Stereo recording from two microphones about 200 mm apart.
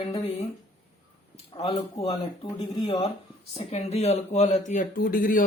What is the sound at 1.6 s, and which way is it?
Speech, 30° left (ahead or behind).